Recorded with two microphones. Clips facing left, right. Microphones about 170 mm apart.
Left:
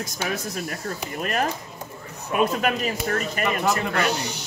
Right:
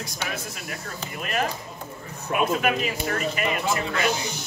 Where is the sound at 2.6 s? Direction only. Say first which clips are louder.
Left 1 dB; 40° left (ahead or behind).